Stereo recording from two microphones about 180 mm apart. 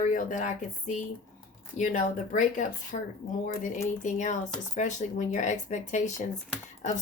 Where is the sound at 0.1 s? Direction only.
45° left (ahead or behind).